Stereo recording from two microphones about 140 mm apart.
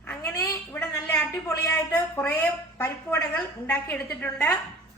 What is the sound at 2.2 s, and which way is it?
A woman's voice, 10° left (ahead or behind).